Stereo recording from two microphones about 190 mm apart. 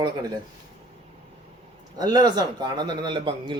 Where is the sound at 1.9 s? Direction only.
20° right (ahead or behind).